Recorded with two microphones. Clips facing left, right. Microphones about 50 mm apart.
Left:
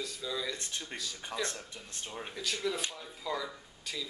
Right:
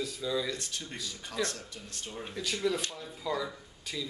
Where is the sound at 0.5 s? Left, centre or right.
Left.